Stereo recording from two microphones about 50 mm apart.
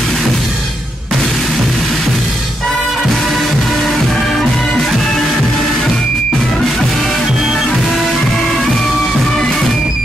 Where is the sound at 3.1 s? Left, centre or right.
Centre.